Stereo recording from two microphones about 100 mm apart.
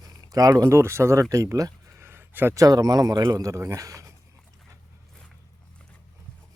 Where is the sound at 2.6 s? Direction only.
35° right (ahead or behind).